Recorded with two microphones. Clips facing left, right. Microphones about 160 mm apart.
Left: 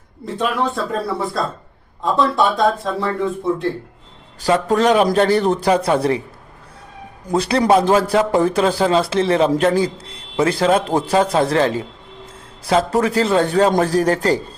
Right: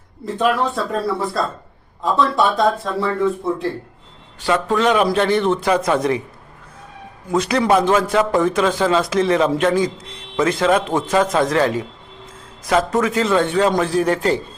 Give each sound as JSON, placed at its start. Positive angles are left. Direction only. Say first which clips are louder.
{"t": 0.3, "sound": "speech", "louder": "right 2 dB", "side_deg": 0}
{"t": 4.4, "sound": "a man's voice", "louder": "left 2 dB", "side_deg": 40}
{"t": 7.3, "sound": "a man's voice", "louder": "left 1 dB", "side_deg": 35}